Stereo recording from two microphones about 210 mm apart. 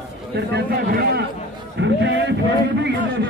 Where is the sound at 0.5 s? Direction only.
50° right (ahead or behind).